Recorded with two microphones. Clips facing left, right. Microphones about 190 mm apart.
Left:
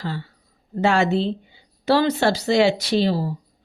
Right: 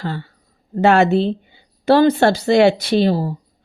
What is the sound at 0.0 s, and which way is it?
Speech, 60° right (ahead or behind).